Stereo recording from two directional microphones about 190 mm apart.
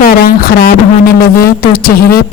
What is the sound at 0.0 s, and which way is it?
A woman's voice, 50° left (ahead or behind).